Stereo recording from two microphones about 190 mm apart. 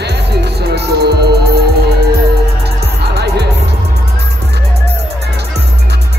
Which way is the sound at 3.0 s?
60° right (ahead or behind).